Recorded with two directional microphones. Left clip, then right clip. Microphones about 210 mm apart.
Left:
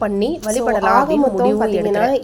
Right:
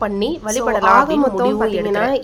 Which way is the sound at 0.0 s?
5° left (ahead or behind).